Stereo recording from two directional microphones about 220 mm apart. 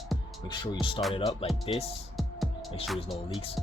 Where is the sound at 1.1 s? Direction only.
25° left (ahead or behind).